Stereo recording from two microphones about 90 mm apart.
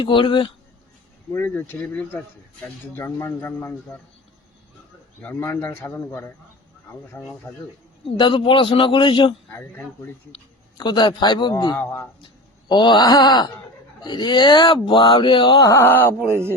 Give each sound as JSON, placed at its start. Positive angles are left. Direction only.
{"t": 0.0, "sound": "a man's voice", "side_deg": 70}
{"t": 1.3, "sound": "speech", "side_deg": 25}
{"t": 5.2, "sound": "speech", "side_deg": 25}
{"t": 8.1, "sound": "a man's voice", "side_deg": 60}
{"t": 9.5, "sound": "speech", "side_deg": 25}
{"t": 10.8, "sound": "speech", "side_deg": 60}
{"t": 11.8, "sound": "speech", "side_deg": 25}
{"t": 12.6, "sound": "groan", "side_deg": 60}
{"t": 14.0, "sound": "speech", "side_deg": 50}
{"t": 15.6, "sound": "speech", "side_deg": 30}